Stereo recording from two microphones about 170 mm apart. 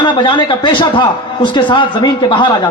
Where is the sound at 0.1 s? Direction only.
30° left (ahead or behind).